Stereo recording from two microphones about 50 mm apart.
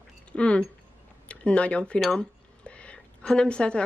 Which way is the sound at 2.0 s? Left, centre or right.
Left.